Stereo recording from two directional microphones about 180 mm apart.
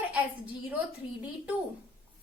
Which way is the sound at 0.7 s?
10° right (ahead or behind).